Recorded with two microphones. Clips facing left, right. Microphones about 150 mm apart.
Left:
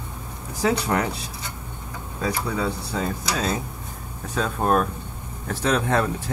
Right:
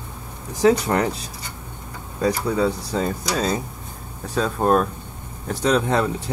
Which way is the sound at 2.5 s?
30° right (ahead or behind).